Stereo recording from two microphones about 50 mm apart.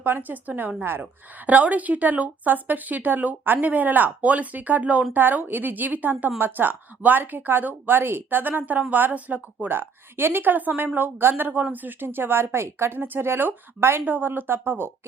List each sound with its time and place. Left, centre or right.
0.0 s a woman's voice: right
9.6 s a woman's voice: right
14.0 s a woman's voice: right